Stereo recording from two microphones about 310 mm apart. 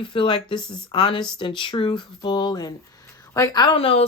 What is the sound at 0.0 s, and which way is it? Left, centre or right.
Speech, centre.